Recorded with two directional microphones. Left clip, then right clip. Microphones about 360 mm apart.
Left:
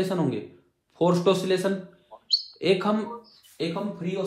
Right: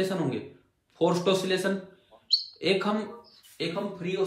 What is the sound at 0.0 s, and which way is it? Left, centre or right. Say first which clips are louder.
A man's voice: left 2 dB; centre.